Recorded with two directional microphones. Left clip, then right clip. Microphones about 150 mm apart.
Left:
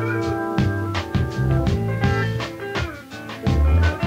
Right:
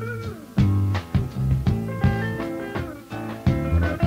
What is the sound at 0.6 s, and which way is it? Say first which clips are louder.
Music: left 4 dB; 35° right (ahead or behind).